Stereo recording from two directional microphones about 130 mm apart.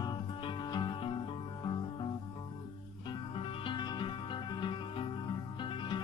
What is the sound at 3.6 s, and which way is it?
Music, 35° left (ahead or behind).